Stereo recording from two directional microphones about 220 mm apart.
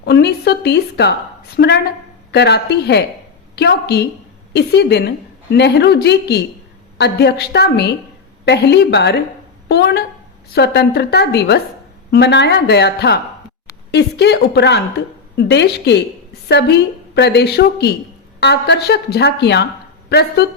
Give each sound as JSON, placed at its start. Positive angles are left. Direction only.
{"t": 0.0, "sound": "a woman's voice", "side_deg": 45}